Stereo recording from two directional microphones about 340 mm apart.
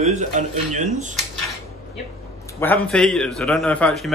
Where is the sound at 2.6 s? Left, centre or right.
Centre.